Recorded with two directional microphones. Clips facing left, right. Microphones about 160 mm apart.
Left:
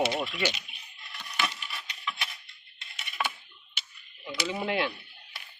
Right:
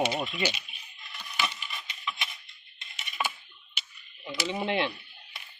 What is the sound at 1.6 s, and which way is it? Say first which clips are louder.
Wood: even; centre (ahead or behind).